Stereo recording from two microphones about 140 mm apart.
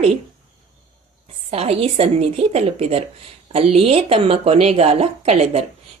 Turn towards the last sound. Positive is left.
turn(degrees=-50)  # may be behind; listen again after turning